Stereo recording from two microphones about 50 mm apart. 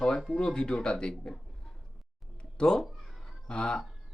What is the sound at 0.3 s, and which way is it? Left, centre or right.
Speech, centre.